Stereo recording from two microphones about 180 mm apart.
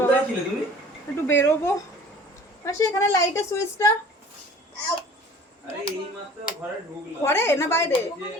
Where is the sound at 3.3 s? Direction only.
15° left (ahead or behind).